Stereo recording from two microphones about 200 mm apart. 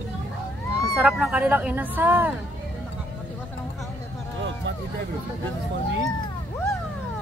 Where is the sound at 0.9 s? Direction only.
5° right (ahead or behind).